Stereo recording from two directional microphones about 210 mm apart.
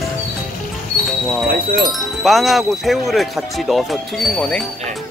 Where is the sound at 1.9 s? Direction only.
Centre (ahead or behind).